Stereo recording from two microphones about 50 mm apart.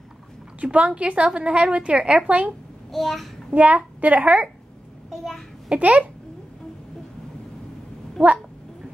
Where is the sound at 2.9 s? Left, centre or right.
Centre.